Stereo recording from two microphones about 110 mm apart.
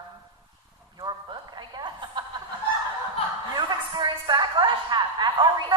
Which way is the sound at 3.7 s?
45° right (ahead or behind).